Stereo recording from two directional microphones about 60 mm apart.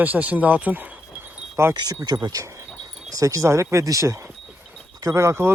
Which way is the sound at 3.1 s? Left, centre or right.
Right.